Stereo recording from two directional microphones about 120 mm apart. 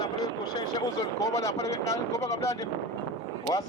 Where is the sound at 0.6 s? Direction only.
30° left (ahead or behind).